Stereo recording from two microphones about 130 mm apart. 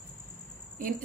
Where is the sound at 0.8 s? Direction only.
90° right.